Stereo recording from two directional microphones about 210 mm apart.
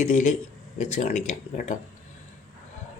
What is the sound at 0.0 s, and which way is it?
Speech, 35° left (ahead or behind).